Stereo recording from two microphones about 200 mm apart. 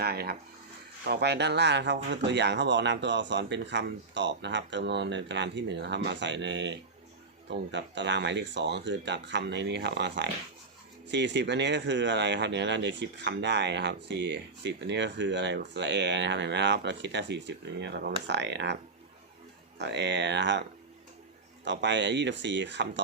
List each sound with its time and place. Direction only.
0.0 s speech: 50° right (ahead or behind)
19.8 s speech: 60° right (ahead or behind)